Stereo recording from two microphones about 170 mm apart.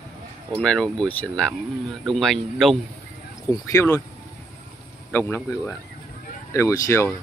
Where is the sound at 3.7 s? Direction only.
15° left (ahead or behind).